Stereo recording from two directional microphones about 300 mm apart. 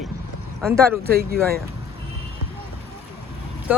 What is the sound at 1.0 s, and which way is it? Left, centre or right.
Speech, right.